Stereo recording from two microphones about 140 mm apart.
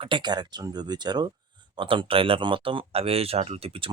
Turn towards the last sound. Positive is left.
turn(degrees=-45)  # may be behind; listen again after turning